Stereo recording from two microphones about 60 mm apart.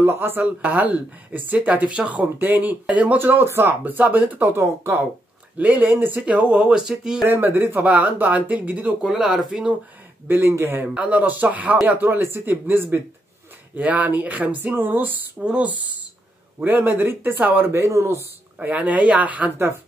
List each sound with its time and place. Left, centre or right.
0.0 s speech: right
0.4 s speech: right
2.2 s speech: right
3.2 s speech: right
5.6 s speech: right; by 7.2 s centre
7.2 s speech: right
9.0 s speech: centre
10.2 s a man's voice: right
11.0 s speech: right
13.7 s speech: right
15.4 s speech: right
16.5 s speech: right
17.7 s speech: right
18.7 s speech: right